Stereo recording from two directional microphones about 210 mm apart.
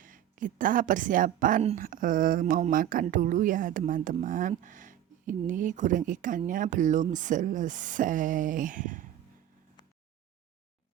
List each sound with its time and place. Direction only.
0.0 s a woman's voice: 40° right (ahead or behind)